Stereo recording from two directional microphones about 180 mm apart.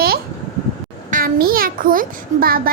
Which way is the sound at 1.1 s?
55° right (ahead or behind).